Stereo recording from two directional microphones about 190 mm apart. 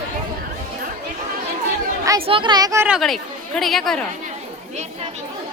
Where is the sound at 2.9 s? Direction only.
Centre (ahead or behind).